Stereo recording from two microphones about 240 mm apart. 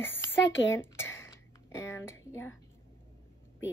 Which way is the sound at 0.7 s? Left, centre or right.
Centre.